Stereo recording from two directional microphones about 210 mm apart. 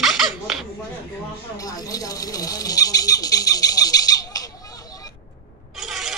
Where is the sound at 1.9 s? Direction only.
15° left (ahead or behind).